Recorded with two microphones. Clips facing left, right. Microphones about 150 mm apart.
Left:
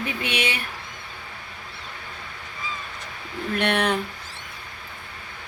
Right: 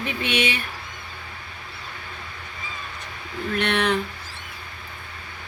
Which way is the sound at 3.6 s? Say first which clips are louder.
Even; 55° left (ahead or behind).